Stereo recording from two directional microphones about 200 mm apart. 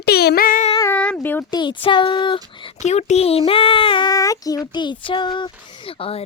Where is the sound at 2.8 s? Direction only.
35° left (ahead or behind).